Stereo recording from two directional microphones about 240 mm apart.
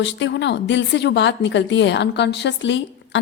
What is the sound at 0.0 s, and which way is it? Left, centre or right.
A woman's voice, left.